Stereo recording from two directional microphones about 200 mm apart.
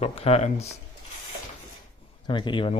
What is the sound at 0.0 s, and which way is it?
Speech, 30° left (ahead or behind).